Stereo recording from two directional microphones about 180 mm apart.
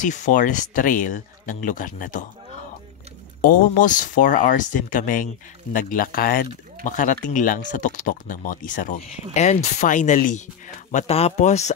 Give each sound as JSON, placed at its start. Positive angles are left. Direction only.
{"t": 0.0, "sound": "speech", "side_deg": 45}
{"t": 3.3, "sound": "speech", "side_deg": 50}